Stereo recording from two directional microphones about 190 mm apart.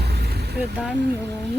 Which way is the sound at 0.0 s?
60° right (ahead or behind).